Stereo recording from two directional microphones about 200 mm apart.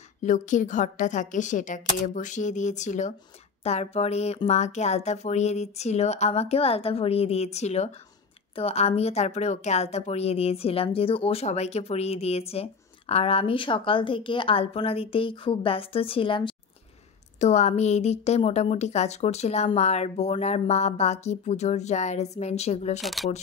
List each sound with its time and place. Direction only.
0.2 s a woman's voice: 40° left (ahead or behind)
22.9 s speech: centre (ahead or behind)